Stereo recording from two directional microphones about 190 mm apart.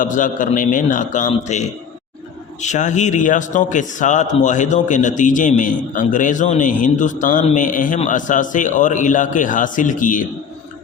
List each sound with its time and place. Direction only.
0.0 s a man's voice: 45° left (ahead or behind)